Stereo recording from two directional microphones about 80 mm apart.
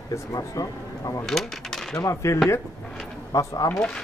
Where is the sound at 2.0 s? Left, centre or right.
Left.